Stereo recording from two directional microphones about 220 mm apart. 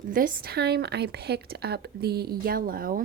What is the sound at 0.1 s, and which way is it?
Speech, 40° right (ahead or behind).